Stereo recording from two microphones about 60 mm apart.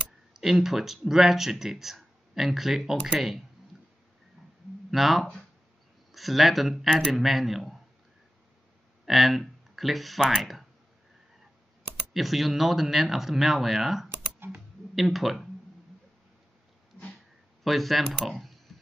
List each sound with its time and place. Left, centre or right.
0.3 s speech: centre
4.9 s speech: centre
9.0 s speech: centre
12.1 s speech: centre
14.0 s computer keyboard: right
15.0 s speech: centre
17.6 s speech: centre